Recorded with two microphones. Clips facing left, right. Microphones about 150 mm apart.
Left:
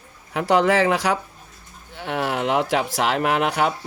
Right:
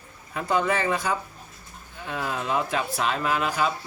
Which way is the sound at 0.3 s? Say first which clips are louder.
Left 7 dB; 80° left.